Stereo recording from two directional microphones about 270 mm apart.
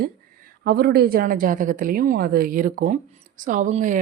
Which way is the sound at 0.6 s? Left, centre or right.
Right.